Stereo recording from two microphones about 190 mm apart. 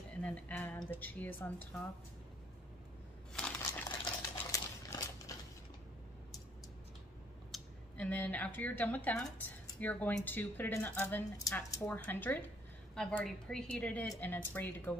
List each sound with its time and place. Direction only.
0.2 s a woman's voice: 5° left (ahead or behind)
4.0 s coin: 20° left (ahead or behind)
7.5 s a woman's voice: 5° left (ahead or behind)